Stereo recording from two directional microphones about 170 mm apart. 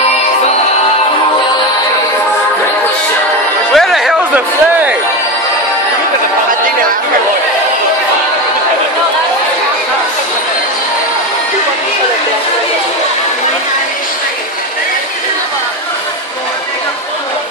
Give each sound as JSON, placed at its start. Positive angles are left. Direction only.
{"t": 3.7, "sound": "music", "side_deg": 0}